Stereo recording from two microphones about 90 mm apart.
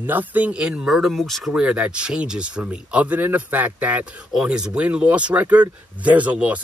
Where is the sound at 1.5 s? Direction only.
10° right (ahead or behind).